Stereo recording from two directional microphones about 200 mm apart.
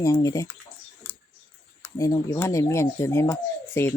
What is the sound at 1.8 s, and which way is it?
Speech, 15° left (ahead or behind).